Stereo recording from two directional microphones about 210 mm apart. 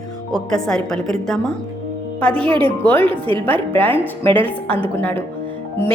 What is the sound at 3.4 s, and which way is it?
Speech, 10° left (ahead or behind).